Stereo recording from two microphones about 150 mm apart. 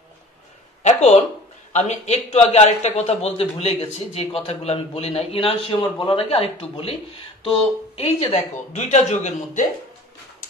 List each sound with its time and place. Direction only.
0.8 s a sound: 50° left (ahead or behind)
1.7 s a man's voice: 50° left (ahead or behind)
8.8 s a man's voice: 55° left (ahead or behind)